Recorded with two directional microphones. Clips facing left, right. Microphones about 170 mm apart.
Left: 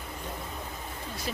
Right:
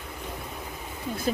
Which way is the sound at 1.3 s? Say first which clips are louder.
Right 9 dB; 40° right (ahead or behind).